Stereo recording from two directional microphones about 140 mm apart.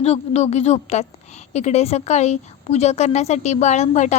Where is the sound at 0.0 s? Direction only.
50° left (ahead or behind).